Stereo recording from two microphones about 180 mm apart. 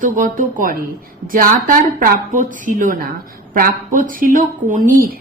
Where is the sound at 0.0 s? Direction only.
50° right (ahead or behind).